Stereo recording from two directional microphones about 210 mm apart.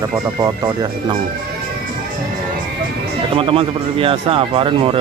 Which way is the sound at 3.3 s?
25° right (ahead or behind).